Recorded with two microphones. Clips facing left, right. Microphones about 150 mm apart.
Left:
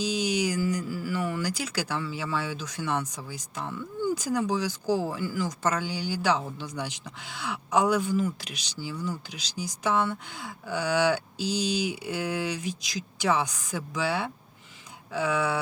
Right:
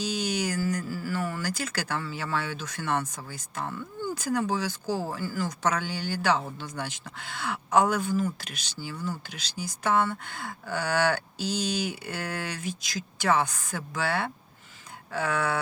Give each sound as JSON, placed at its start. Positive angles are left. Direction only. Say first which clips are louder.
{"t": 0.0, "sound": "mantra", "louder": "left 2 dB", "side_deg": -50}
{"t": 0.8, "sound": "music", "louder": "left 1 dB", "side_deg": 15}
{"t": 1.3, "sound": "speech", "louder": "left 2 dB", "side_deg": -50}
{"t": 5.6, "sound": "speech", "louder": "right 1 dB", "side_deg": -60}